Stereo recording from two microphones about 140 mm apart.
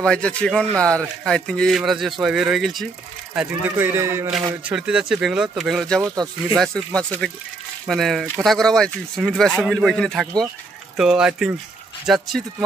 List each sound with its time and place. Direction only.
0.0 s a man's voice: 5° left (ahead or behind)
3.3 s a man's voice: 15° right (ahead or behind)
4.6 s a man's voice: 5° right (ahead or behind)